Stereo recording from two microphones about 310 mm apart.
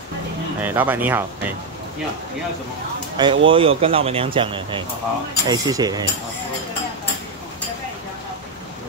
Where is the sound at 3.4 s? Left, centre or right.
Centre.